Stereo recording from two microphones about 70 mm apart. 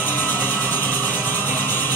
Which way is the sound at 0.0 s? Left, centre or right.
Left.